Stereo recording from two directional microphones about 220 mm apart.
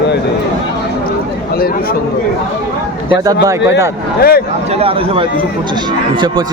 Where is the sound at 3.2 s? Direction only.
15° right (ahead or behind).